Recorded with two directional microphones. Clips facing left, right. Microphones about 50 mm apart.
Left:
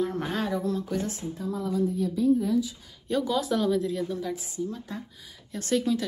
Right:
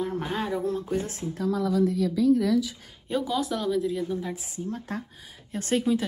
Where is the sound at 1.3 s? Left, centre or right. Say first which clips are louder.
Right 7 dB; right.